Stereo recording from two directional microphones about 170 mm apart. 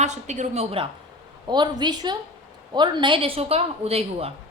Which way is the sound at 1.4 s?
25° right (ahead or behind).